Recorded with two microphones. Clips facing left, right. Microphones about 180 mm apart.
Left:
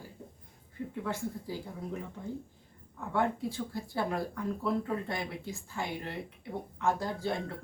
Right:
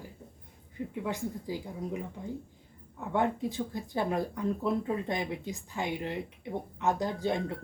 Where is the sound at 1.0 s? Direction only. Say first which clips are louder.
Right 2 dB; 15° right (ahead or behind).